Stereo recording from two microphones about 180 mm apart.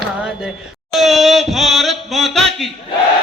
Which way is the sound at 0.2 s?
Centre (ahead or behind).